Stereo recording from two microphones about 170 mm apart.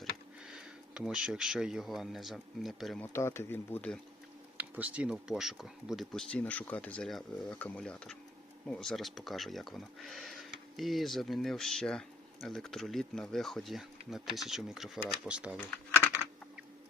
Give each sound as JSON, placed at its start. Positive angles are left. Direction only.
{"t": 0.4, "sound": "speech", "side_deg": -5}
{"t": 3.0, "sound": "speech", "side_deg": 15}
{"t": 4.5, "sound": "speech", "side_deg": -10}